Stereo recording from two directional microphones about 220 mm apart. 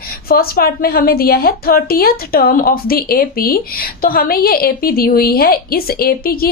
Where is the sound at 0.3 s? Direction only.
45° left (ahead or behind).